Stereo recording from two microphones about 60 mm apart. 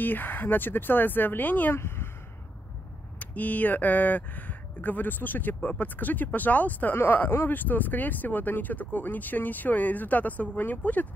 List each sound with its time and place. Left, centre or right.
0.0 s speech: left
1.8 s a sound: left
3.2 s speech: left